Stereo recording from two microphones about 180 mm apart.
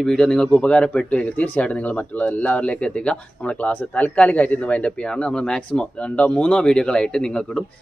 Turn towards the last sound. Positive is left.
turn(degrees=5)  # may be behind; listen again after turning